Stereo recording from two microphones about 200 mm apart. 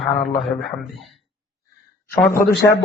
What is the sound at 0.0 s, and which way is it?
Speech, centre (ahead or behind).